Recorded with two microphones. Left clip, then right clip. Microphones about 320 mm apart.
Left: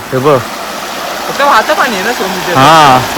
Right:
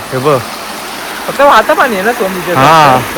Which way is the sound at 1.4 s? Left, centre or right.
Right.